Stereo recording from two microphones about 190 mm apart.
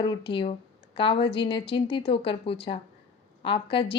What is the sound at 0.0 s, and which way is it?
A woman's voice, 25° left (ahead or behind).